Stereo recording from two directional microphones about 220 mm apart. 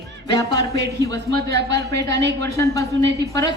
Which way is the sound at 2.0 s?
50° right (ahead or behind).